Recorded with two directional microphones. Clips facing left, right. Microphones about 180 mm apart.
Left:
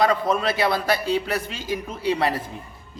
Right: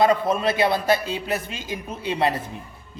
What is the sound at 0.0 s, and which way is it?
A man's voice, 25° right (ahead or behind).